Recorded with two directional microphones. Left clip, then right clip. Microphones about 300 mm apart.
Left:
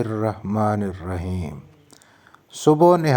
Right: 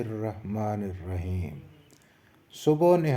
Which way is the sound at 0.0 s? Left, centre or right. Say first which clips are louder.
Left 9 dB; left.